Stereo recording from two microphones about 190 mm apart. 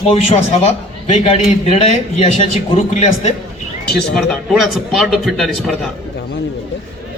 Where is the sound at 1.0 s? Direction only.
35° left (ahead or behind).